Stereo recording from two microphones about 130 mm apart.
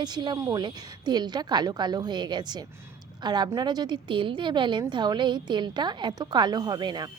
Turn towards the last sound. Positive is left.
turn(degrees=-35)  # may be behind; listen again after turning